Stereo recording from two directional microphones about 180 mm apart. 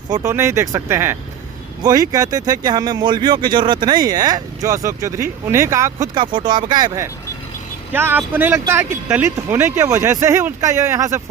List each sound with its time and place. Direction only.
0.1 s speech: 15° right (ahead or behind)